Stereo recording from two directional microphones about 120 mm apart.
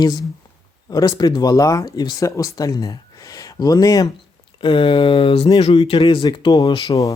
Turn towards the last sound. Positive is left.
turn(degrees=25)  # may be behind; listen again after turning